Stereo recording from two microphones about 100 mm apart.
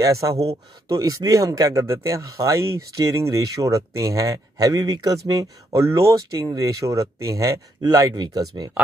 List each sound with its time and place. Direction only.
0.0 s speech: 35° right (ahead or behind)